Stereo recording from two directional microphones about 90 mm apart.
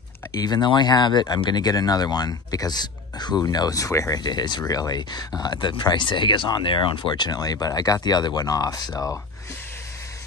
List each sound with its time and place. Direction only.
0.4 s speech: 55° left (ahead or behind); by 4.2 s 35° left (ahead or behind)
4.2 s speech: 50° left (ahead or behind)
8.9 s speech: 30° left (ahead or behind)